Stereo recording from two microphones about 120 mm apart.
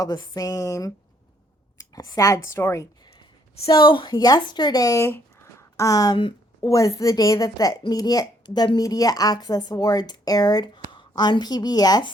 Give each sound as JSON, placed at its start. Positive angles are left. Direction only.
{"t": 0.0, "sound": "a woman's voice", "side_deg": 30}
{"t": 3.7, "sound": "a woman's voice", "side_deg": 40}